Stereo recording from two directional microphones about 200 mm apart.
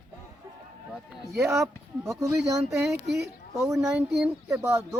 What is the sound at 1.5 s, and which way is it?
Speech, 15° right (ahead or behind).